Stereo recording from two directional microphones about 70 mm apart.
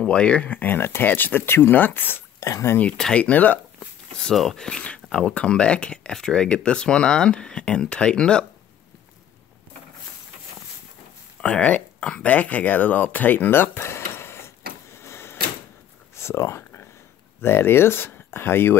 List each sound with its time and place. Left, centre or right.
0.0 s speech: centre
2.4 s speech: left
3.0 s speech: centre
4.2 s speech: centre
11.4 s speech: centre; by 14.4 s left
14.9 s a sound: left
17.4 s speech: left